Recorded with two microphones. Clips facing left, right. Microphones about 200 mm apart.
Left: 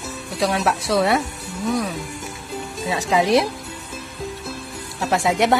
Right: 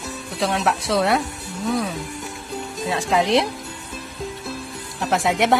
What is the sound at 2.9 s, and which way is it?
Speech, centre (ahead or behind).